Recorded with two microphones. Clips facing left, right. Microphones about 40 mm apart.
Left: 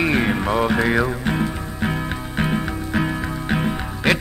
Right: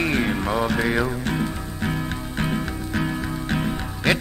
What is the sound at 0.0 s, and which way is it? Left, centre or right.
Music, centre.